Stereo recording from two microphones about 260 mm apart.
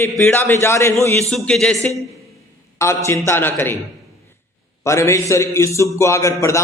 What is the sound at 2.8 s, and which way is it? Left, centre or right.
A man's voice, centre.